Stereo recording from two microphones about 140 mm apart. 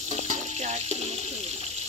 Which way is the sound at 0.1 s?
55° right (ahead or behind).